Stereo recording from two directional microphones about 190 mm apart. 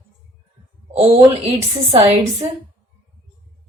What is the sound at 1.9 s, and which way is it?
Speech, 30° right (ahead or behind).